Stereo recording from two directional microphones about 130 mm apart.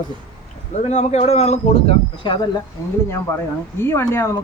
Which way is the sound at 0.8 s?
55° left (ahead or behind).